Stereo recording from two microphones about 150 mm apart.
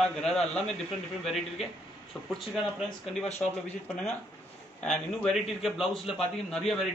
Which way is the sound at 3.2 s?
50° left (ahead or behind).